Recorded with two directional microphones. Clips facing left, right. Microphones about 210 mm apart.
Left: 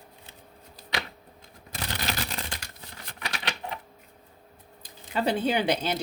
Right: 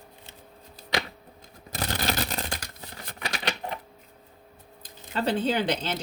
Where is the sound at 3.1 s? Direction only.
40° right (ahead or behind).